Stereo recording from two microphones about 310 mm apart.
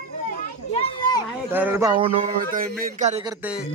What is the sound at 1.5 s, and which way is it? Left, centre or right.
A man's voice, centre.